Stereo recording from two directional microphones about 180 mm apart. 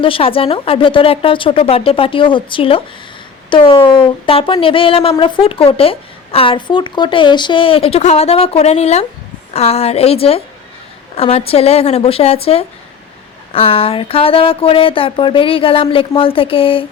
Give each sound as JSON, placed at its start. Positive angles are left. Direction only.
{"t": 0.0, "sound": "a woman's voice", "side_deg": 30}